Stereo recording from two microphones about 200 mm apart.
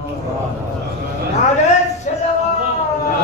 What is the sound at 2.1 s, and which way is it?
Music, 40° left (ahead or behind).